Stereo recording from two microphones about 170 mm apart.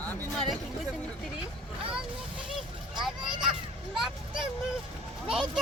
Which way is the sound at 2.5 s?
Centre (ahead or behind).